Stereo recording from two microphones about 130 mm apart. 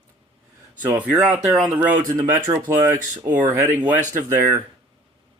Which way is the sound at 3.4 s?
15° right (ahead or behind).